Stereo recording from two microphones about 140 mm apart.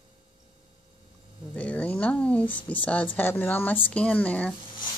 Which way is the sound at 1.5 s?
10° left (ahead or behind).